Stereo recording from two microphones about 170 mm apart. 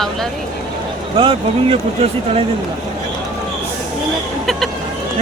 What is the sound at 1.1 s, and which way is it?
Speech, 30° right (ahead or behind).